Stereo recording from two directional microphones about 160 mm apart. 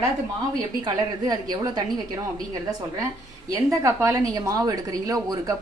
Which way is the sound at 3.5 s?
20° right (ahead or behind).